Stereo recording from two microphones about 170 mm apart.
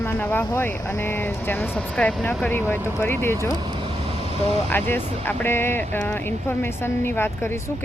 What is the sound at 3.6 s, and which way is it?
Vehicle, 30° right (ahead or behind).